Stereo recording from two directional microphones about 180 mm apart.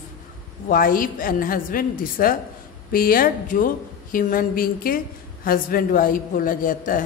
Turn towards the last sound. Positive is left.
turn(degrees=50)  # may be behind; listen again after turning